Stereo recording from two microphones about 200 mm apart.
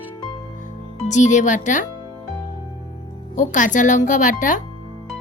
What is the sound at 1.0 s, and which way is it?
Speech, 35° left (ahead or behind).